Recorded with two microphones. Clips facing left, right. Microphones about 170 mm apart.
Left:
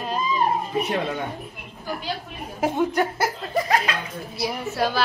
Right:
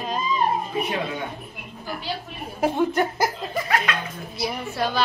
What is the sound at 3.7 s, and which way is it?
Speech, 35° left (ahead or behind).